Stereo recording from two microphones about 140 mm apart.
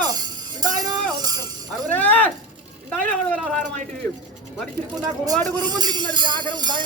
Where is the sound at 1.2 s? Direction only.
30° right (ahead or behind).